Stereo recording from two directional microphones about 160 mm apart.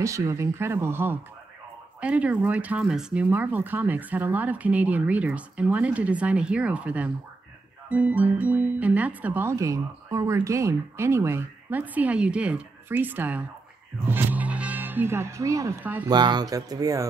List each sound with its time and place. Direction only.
0.0 s speech: 20° right (ahead or behind)
16.1 s speech: 25° right (ahead or behind)